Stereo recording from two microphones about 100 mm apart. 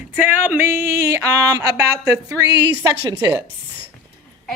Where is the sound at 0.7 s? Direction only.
30° right (ahead or behind).